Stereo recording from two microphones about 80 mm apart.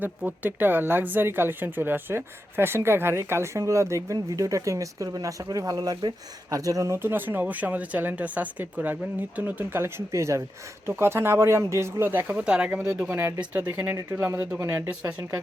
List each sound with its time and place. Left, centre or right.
0.2 s speech: centre; by 6.1 s right
6.5 s speech: right
7.0 s speech: right
10.1 s speech: right
12.5 s speech: centre
13.1 s speech: right